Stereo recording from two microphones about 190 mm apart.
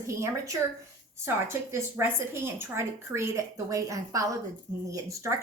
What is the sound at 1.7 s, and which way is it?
A woman's voice, 15° right (ahead or behind).